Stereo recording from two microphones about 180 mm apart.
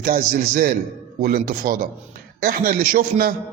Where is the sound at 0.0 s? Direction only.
55° right (ahead or behind).